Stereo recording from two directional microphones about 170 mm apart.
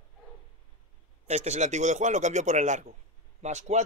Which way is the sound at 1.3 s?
45° right (ahead or behind).